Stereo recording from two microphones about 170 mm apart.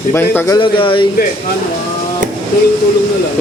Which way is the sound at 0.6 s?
30° left (ahead or behind).